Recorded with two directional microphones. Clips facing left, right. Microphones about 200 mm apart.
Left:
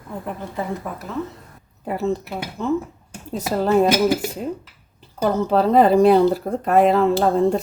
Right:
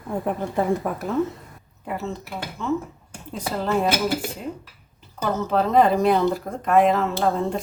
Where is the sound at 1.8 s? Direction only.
35° left (ahead or behind).